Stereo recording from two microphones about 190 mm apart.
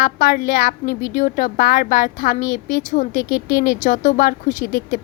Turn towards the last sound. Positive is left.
turn(degrees=45)  # may be behind; listen again after turning